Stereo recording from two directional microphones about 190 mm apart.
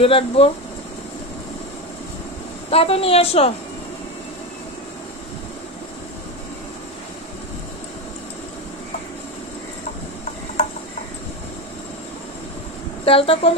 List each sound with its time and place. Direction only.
0.0 s speech: 30° left (ahead or behind)
2.7 s a woman's voice: 30° left (ahead or behind)
13.0 s speech: 30° left (ahead or behind)